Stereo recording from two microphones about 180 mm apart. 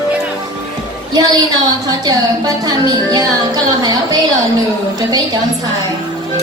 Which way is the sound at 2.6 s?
20° right (ahead or behind).